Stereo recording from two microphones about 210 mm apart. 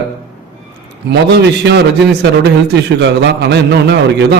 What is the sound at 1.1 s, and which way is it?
Speech, 50° right (ahead or behind).